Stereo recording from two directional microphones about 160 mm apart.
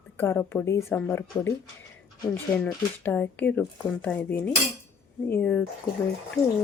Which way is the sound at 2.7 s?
10° left (ahead or behind).